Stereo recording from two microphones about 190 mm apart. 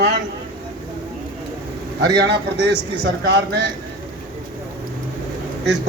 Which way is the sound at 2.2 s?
60° right (ahead or behind).